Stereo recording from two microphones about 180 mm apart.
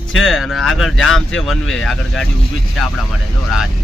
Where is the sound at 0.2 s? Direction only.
Centre (ahead or behind).